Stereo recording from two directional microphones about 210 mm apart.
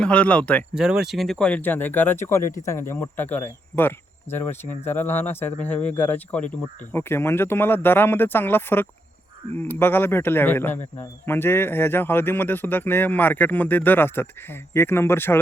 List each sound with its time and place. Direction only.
0.0 s speech: 5° left (ahead or behind)
2.4 s speech: 35° left (ahead or behind)
2.6 s speech: 10° left (ahead or behind)